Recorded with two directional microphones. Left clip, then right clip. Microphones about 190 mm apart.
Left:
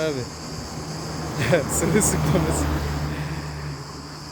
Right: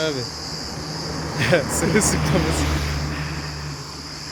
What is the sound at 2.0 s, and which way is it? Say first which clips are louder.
Speech: right 2 dB; 60° left (ahead or behind).